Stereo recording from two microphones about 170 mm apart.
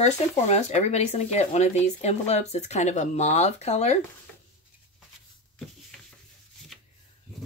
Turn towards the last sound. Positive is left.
turn(degrees=5)  # may be behind; listen again after turning